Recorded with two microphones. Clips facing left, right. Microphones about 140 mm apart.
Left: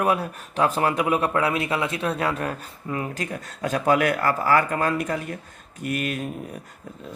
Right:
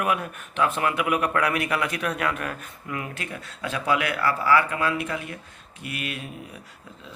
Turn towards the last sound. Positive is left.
turn(degrees=45)  # may be behind; listen again after turning